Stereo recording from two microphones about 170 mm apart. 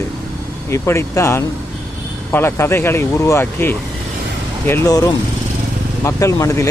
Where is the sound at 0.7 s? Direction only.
15° left (ahead or behind).